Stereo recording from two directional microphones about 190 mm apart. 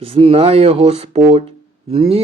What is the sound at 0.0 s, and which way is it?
Speech, 30° right (ahead or behind).